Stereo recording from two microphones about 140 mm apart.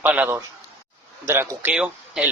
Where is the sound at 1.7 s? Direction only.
5° right (ahead or behind).